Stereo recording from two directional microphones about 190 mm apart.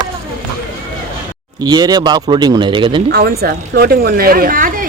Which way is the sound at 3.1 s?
55° right (ahead or behind).